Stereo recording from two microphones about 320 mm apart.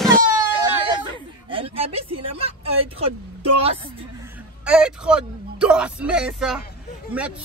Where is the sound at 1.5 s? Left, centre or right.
Centre.